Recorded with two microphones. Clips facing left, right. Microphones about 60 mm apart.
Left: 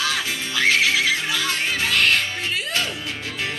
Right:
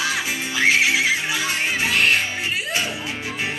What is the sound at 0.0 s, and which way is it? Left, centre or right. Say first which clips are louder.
Music: right 1 dB; centre.